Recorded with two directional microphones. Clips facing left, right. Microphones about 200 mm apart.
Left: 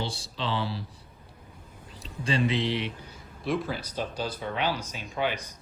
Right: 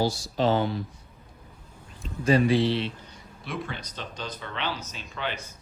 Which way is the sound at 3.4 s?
Centre (ahead or behind).